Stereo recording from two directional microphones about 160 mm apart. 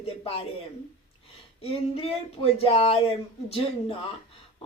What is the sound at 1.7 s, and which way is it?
Speech, 40° left (ahead or behind).